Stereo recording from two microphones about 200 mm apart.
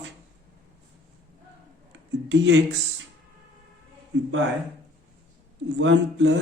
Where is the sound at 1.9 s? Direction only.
65° right (ahead or behind).